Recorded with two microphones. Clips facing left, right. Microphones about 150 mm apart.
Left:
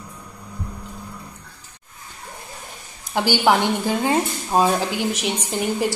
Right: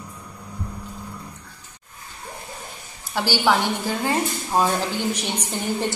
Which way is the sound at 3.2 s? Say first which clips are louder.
Left 3 dB; 15° left (ahead or behind).